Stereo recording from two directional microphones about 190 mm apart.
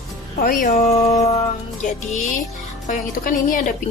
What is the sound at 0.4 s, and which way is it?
Speech, 45° left (ahead or behind).